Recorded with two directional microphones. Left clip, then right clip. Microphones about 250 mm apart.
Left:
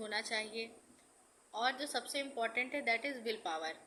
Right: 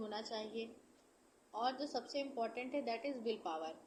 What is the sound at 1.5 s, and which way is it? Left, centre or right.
A woman's voice, centre.